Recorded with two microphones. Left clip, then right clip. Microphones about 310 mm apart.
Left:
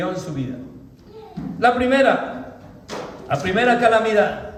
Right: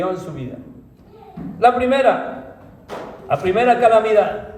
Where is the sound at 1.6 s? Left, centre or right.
Centre.